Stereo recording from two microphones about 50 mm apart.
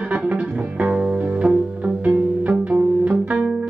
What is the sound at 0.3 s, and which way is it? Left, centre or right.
Music, right.